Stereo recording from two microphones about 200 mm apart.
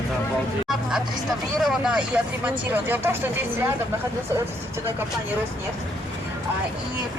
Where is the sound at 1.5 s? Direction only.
Centre (ahead or behind).